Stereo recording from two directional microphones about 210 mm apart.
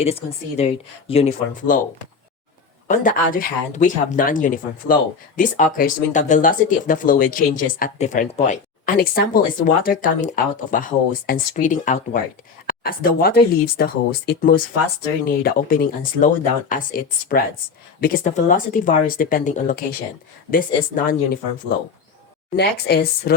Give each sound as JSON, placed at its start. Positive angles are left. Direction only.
{"t": 0.0, "sound": "speech", "side_deg": 30}
{"t": 2.8, "sound": "speech", "side_deg": 40}